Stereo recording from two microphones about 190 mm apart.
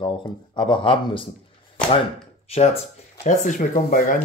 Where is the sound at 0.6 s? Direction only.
25° left (ahead or behind).